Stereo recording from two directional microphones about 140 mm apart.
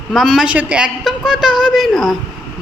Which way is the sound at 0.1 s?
Centre (ahead or behind).